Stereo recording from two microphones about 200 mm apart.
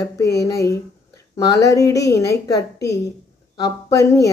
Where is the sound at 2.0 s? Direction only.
55° left (ahead or behind).